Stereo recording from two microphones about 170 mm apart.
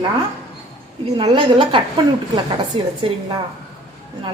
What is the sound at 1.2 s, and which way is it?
A woman's voice, 30° right (ahead or behind).